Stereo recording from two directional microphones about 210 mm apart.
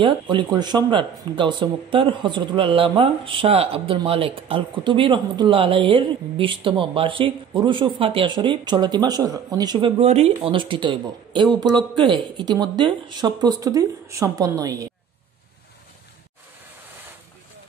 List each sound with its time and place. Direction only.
0.0 s speech: 20° right (ahead or behind)